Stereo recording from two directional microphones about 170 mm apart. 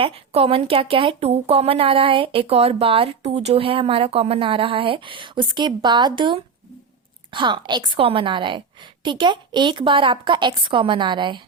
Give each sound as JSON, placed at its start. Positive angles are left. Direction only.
{"t": 0.0, "sound": "a woman's voice", "side_deg": -35}